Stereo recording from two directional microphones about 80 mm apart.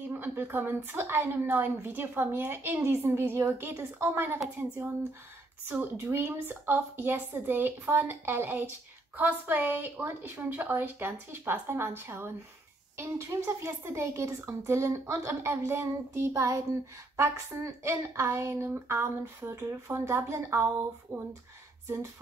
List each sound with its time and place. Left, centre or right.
0.3 s a woman's voice: right
5.7 s a woman's voice: right